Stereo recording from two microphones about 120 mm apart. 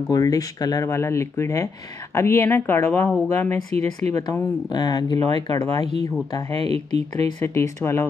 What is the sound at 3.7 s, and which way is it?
Speech, 65° right (ahead or behind).